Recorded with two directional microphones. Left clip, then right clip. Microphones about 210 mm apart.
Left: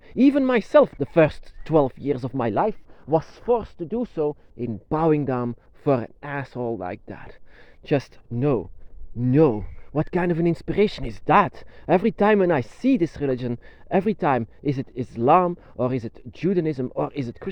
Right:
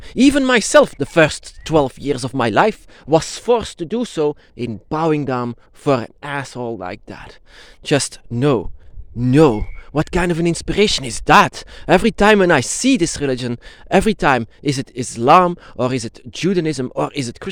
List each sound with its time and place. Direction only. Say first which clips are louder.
0.0 s speech: right 5 dB; 30° right (ahead or behind)
2.6 s speech: right 8 dB; 50° right (ahead or behind)
4.9 s speech: right 3 dB; 20° right (ahead or behind)